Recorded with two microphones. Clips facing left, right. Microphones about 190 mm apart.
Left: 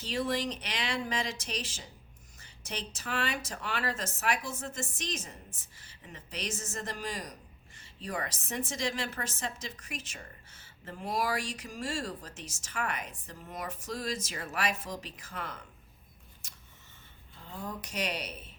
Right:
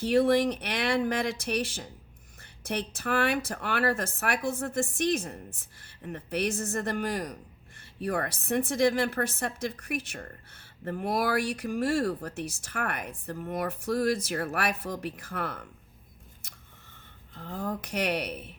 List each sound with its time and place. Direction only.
0.0 s a woman's voice: 60° right (ahead or behind)
17.3 s a woman's voice: 65° right (ahead or behind)